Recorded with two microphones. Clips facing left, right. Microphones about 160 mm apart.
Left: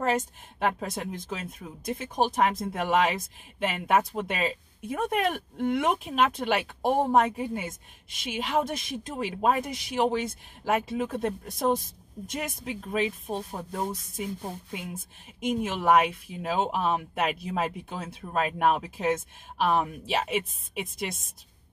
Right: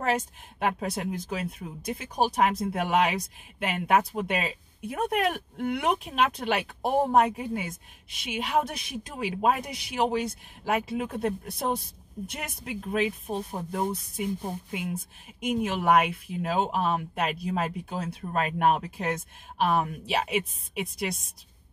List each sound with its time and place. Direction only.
0.0 s speech: centre (ahead or behind)
9.7 s speech: 45° left (ahead or behind)
9.9 s speech: centre (ahead or behind)